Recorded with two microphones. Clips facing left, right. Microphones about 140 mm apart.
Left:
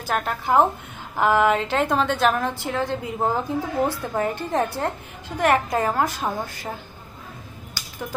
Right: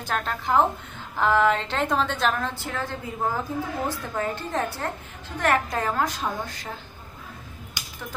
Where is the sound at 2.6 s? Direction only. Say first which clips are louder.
Left 6 dB; 15° left (ahead or behind).